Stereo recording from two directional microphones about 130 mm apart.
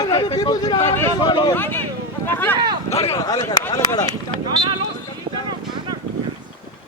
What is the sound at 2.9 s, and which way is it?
Speech, 55° left (ahead or behind).